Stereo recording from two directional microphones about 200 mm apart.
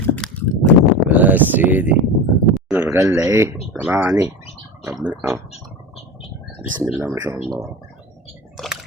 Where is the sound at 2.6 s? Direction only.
5° right (ahead or behind).